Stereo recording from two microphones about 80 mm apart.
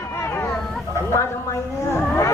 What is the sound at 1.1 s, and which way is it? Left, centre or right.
Speech, left.